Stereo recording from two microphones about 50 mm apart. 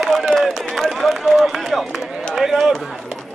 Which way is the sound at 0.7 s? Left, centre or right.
Centre.